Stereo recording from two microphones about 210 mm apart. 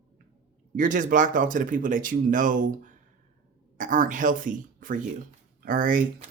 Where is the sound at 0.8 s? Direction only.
35° right (ahead or behind).